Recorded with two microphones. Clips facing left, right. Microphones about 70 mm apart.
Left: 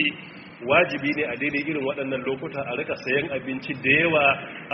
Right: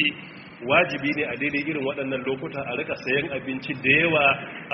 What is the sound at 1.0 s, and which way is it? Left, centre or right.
A man's voice, centre.